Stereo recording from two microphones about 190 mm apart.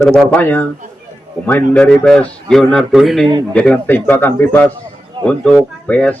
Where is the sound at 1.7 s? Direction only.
5° left (ahead or behind).